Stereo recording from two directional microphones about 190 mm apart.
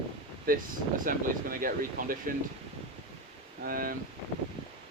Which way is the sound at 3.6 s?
50° right (ahead or behind).